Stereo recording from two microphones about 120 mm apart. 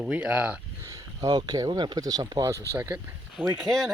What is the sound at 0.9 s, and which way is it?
Speech, 35° right (ahead or behind).